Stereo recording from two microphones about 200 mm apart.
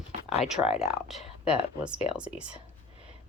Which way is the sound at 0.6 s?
30° left (ahead or behind).